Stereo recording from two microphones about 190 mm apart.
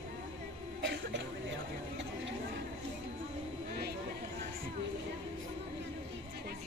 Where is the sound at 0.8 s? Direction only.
70° right (ahead or behind).